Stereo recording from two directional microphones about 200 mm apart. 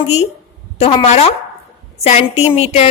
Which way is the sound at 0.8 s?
30° left (ahead or behind).